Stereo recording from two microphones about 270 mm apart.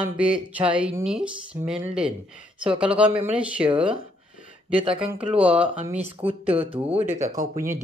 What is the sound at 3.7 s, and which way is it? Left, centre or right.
Speech, centre.